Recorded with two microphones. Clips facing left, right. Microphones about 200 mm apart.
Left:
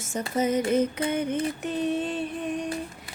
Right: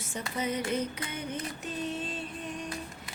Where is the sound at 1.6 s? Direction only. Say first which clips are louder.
Left 6 dB; 60° left (ahead or behind).